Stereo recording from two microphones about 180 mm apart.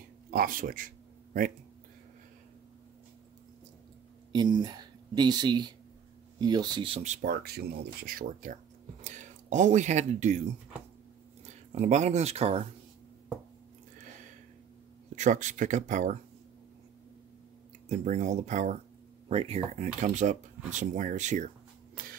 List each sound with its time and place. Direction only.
0.3 s speech: 50° right (ahead or behind)
4.3 s speech: 25° right (ahead or behind); by 7.2 s 40° right (ahead or behind)
7.2 s speech: 60° right (ahead or behind); by 10.4 s 40° right (ahead or behind)
11.7 s speech: 40° right (ahead or behind)
15.1 s speech: 45° right (ahead or behind)
17.8 s speech: 40° right (ahead or behind)